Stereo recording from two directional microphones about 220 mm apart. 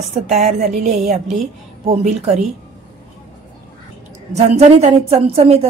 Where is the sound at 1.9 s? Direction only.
30° right (ahead or behind).